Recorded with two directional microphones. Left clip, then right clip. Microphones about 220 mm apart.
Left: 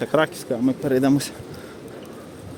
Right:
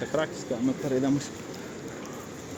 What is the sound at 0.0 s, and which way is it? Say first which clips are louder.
Speech: left 8 dB; 50° left (ahead or behind).